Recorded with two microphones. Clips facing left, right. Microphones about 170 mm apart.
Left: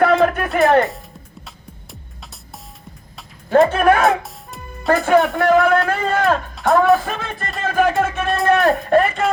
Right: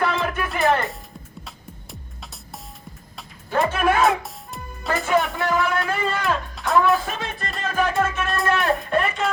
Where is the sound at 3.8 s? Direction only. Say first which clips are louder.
Left 6 dB; 60° left (ahead or behind).